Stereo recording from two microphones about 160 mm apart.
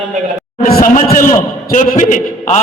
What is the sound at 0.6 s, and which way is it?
A man's voice, 60° left (ahead or behind).